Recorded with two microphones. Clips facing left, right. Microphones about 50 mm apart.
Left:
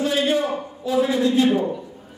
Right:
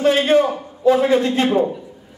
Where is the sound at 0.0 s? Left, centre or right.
Right.